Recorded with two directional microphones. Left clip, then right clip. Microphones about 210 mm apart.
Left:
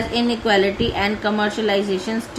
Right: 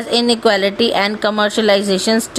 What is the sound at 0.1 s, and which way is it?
A woman's voice, 55° right (ahead or behind).